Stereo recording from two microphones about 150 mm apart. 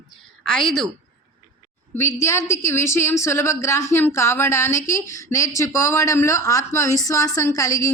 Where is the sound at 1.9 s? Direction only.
15° left (ahead or behind).